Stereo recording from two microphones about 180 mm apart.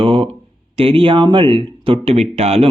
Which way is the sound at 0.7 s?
30° right (ahead or behind).